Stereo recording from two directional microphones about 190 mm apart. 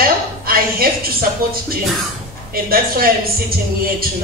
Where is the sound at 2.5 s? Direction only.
50° right (ahead or behind).